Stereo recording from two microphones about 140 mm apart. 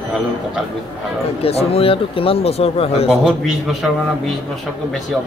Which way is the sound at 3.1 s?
Centre (ahead or behind).